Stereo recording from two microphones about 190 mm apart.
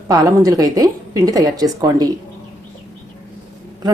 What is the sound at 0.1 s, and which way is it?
A woman's voice, 20° right (ahead or behind).